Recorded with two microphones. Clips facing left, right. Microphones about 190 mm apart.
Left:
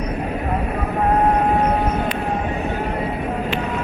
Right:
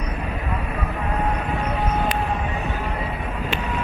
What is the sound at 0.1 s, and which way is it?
Vehicle, 45° left (ahead or behind).